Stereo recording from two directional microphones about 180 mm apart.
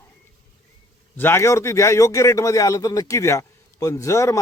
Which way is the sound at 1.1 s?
10° left (ahead or behind).